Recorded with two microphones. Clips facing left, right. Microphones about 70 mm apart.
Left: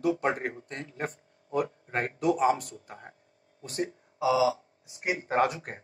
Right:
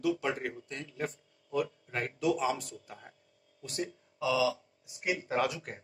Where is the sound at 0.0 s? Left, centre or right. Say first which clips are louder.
Left 4 dB; left.